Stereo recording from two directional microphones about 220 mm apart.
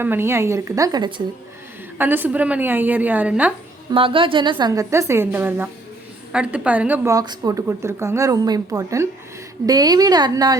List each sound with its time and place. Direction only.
0.0 s a woman's voice: 10° right (ahead or behind)
3.9 s a woman's voice: 25° right (ahead or behind)